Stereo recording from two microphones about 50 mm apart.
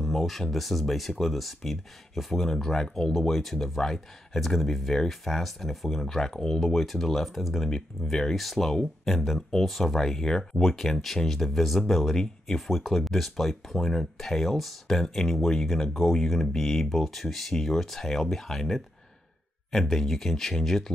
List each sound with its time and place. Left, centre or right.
0.0 s speech: centre